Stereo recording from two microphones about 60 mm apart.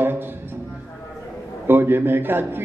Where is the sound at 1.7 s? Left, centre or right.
Right.